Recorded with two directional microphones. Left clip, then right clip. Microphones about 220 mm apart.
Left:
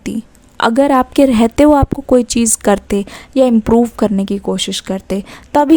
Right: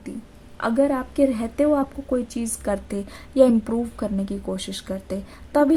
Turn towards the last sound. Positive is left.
turn(degrees=35)  # may be behind; listen again after turning